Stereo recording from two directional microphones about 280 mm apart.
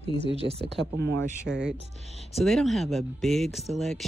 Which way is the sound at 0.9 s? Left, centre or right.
Right.